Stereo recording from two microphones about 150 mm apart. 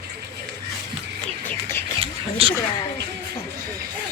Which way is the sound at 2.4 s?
40° right (ahead or behind).